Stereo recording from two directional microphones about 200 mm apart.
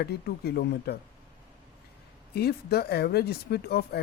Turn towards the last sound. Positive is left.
turn(degrees=55)  # may be behind; listen again after turning